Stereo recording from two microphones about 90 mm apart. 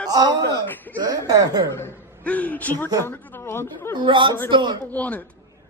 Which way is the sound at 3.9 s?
65° right (ahead or behind).